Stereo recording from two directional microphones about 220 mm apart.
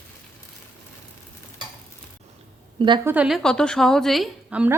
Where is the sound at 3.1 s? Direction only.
5° right (ahead or behind).